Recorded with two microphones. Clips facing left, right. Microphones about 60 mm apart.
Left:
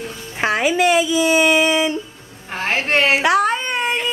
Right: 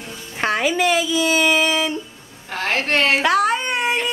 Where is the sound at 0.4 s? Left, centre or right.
Centre.